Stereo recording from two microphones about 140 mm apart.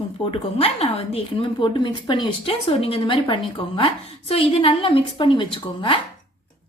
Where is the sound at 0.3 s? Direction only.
45° left (ahead or behind).